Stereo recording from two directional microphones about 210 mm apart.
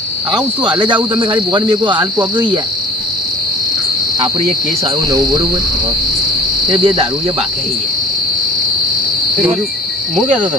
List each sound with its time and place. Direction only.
0.3 s cricket: 20° right (ahead or behind)
6.7 s cricket: 20° right (ahead or behind)